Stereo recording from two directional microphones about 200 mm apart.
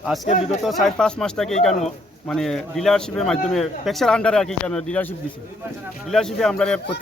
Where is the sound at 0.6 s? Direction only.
Centre (ahead or behind).